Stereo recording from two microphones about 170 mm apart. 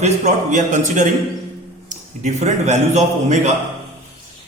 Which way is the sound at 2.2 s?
40° right (ahead or behind).